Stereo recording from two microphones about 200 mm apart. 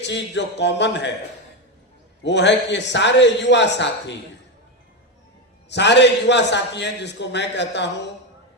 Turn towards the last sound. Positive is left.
turn(degrees=60)  # may be behind; listen again after turning